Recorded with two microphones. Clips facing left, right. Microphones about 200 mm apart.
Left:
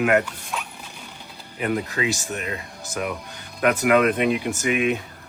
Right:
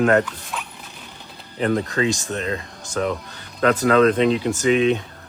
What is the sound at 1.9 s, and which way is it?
Speech, 15° left (ahead or behind).